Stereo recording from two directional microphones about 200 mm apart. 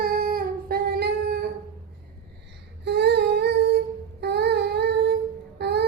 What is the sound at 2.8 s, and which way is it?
Humming, 60° right (ahead or behind).